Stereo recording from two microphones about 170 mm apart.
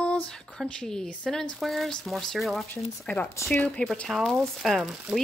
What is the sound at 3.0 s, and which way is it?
Speech, 10° left (ahead or behind).